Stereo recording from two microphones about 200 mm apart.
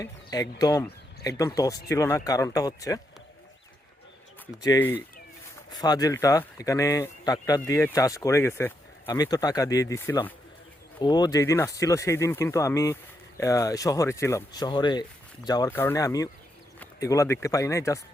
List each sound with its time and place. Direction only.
0.0 s speech: 20° left (ahead or behind)
4.6 s speech: 15° left (ahead or behind)